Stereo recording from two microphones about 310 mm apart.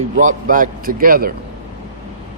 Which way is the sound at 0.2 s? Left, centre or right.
Right.